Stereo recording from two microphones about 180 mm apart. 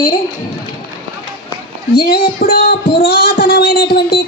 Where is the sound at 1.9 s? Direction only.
55° left (ahead or behind).